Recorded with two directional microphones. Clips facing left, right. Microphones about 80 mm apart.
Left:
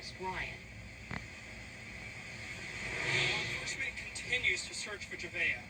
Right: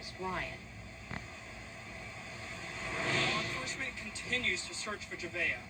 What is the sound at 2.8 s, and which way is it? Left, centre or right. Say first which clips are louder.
Speech: right 3 dB; right.